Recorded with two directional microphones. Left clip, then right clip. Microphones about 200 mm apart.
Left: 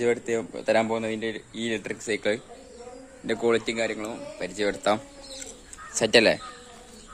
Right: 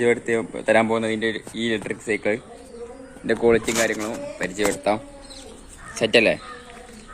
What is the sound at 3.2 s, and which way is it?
Speech, 5° left (ahead or behind).